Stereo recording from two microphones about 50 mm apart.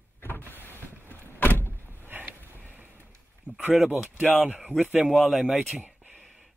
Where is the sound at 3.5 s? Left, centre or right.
Left.